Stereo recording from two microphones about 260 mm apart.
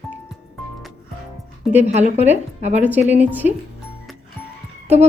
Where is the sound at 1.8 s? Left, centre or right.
Right.